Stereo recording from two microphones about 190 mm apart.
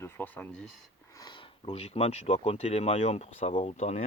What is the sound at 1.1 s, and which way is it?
Speech, 20° left (ahead or behind).